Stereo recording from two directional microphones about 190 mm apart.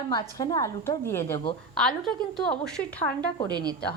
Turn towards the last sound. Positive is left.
turn(degrees=-20)  # may be behind; listen again after turning